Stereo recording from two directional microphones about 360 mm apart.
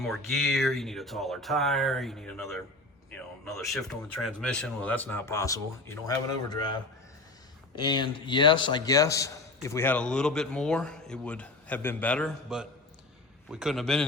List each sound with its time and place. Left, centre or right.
0.0 s a man's voice: centre
7.8 s a man's voice: centre